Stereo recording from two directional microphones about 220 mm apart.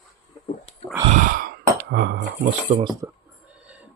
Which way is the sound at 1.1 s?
40° right (ahead or behind).